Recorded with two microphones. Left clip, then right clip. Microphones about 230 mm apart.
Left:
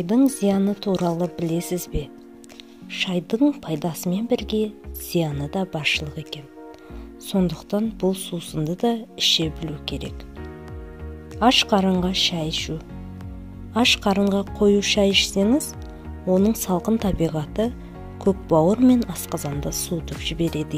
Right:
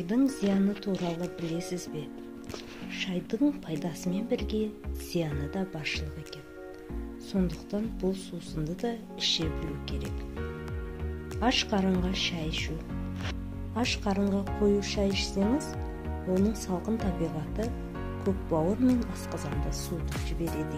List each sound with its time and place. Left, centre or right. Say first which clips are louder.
0.0 s speech: left 8 dB; left
11.3 s speech: left 10 dB; left
13.7 s speech: left 11 dB; left